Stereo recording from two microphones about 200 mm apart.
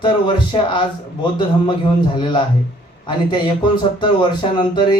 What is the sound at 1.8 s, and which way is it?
A man's voice, 25° left (ahead or behind).